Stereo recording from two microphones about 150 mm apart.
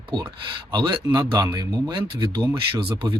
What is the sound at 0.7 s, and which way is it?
Speech, 30° right (ahead or behind).